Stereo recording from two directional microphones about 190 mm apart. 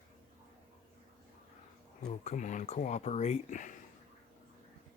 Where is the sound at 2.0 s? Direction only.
35° left (ahead or behind).